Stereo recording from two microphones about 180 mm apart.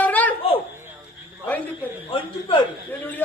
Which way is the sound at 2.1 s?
30° left (ahead or behind).